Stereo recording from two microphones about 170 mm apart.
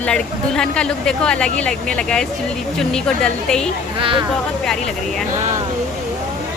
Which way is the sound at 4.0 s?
30° right (ahead or behind).